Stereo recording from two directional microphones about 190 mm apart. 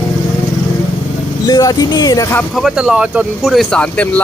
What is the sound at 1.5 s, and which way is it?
Speech, 20° left (ahead or behind).